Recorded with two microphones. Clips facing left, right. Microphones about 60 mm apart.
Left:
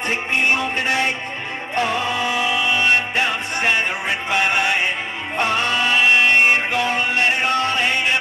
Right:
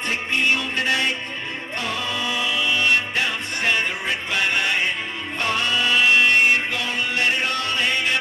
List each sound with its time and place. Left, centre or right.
0.1 s music: left
5.9 s music: left